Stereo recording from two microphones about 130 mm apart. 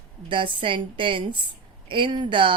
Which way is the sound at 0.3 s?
40° right (ahead or behind).